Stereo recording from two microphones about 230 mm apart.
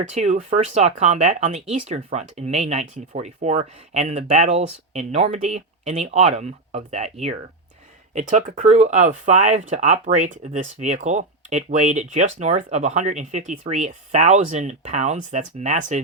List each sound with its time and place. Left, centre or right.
0.1 s speech: right